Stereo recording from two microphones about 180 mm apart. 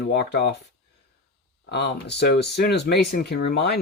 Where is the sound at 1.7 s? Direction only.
65° left (ahead or behind).